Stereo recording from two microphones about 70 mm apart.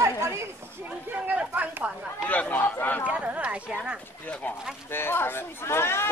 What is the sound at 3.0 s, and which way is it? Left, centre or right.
Speech, centre.